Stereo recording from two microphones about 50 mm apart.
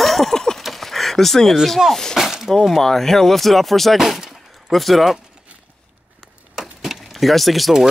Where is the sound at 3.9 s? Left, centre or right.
Centre.